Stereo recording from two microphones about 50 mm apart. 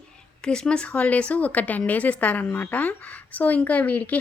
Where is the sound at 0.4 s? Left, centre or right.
Centre.